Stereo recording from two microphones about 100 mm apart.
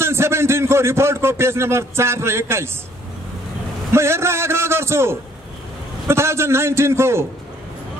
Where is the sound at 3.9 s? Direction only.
25° right (ahead or behind).